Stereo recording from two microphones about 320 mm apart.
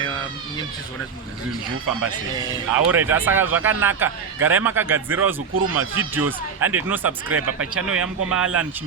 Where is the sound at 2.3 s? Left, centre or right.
Centre.